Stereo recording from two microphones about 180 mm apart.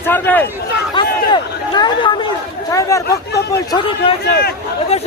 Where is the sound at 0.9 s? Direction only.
25° left (ahead or behind).